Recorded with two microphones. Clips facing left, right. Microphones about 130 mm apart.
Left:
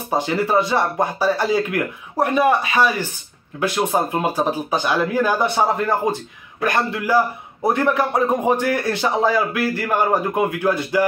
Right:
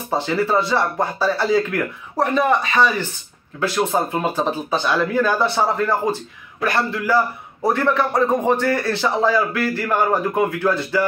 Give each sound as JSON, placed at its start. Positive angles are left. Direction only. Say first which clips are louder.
{"t": 0.1, "sound": "a man's voice", "louder": "left 1 dB", "side_deg": 15}